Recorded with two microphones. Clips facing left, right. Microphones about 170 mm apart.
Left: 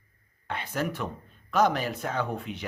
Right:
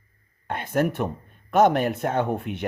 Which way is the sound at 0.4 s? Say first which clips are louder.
Right 7 dB; 50° right (ahead or behind).